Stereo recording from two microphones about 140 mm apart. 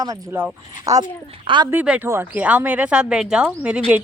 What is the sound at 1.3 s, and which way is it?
Speech, 35° right (ahead or behind).